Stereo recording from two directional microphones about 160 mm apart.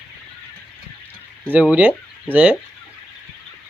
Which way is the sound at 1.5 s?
10° right (ahead or behind).